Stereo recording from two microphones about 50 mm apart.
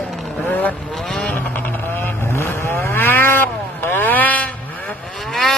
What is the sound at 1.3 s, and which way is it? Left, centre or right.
Vehicle, left.